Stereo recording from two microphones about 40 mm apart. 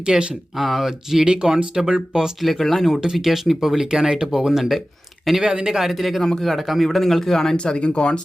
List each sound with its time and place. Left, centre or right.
0.0 s speech: right
0.5 s speech: centre
2.4 s a man's voice: centre
2.8 s a man's voice: centre
7.5 s speech: left